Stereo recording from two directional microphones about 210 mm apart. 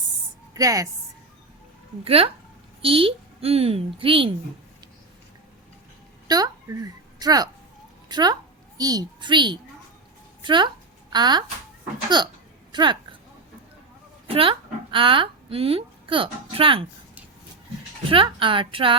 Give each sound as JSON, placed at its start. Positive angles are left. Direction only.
{"t": 0.5, "sound": "a woman's voice", "side_deg": -15}
{"t": 2.0, "sound": "a child's voice", "side_deg": -25}
{"t": 6.2, "sound": "a woman's voice", "side_deg": -20}
{"t": 14.3, "sound": "speech", "side_deg": -25}
{"t": 18.1, "sound": "a child's voice", "side_deg": -25}